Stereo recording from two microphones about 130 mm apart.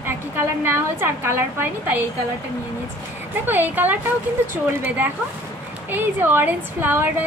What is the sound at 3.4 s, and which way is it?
A woman's voice, 15° right (ahead or behind).